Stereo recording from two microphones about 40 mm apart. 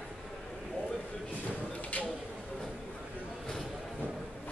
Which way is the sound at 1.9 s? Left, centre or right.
Left.